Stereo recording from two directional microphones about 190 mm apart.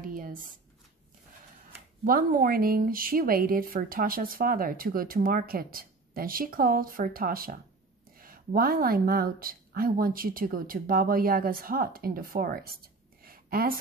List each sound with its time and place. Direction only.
0.1 s a sound: 45° right (ahead or behind)
2.0 s speech: 50° right (ahead or behind)
8.5 s speech: 50° right (ahead or behind)